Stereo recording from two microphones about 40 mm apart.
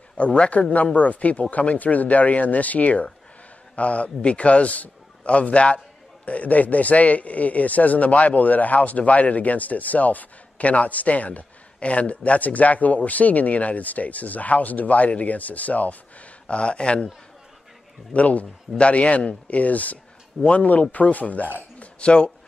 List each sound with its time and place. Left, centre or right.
0.2 s a man's voice: left
18.1 s a man's voice: left
21.7 s speech: left